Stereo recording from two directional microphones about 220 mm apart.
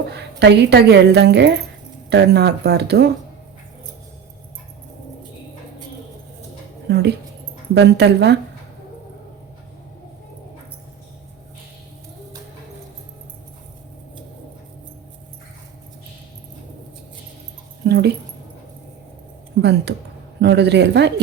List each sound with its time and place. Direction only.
0.1 s a woman's voice: 50° right (ahead or behind)
6.8 s speech: 50° right (ahead or behind)
17.8 s speech: 50° right (ahead or behind)
20.4 s speech: 50° right (ahead or behind)